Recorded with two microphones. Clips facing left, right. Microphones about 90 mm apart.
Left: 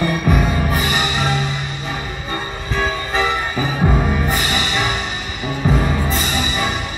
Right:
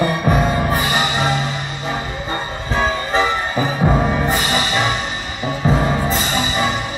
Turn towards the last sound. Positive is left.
turn(degrees=-25)  # may be behind; listen again after turning